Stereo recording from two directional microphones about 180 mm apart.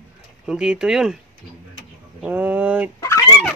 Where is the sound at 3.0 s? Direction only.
15° left (ahead or behind).